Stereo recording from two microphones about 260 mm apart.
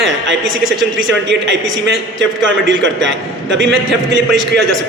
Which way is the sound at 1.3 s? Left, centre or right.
Right.